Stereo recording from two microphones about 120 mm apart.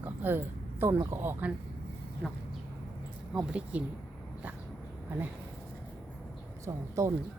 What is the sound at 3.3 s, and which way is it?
Speech, 10° right (ahead or behind).